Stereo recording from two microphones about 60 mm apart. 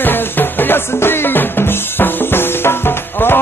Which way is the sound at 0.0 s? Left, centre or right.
Left.